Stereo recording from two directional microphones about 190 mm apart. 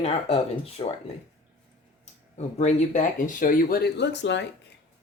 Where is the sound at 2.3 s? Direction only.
35° left (ahead or behind); by 4.5 s 65° left (ahead or behind).